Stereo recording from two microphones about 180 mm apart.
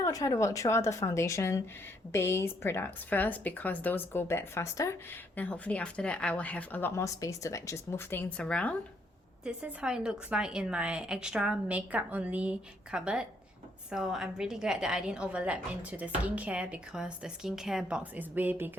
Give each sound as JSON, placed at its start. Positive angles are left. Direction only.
{"t": 0.0, "sound": "speech", "side_deg": 20}
{"t": 9.4, "sound": "a woman's voice", "side_deg": -5}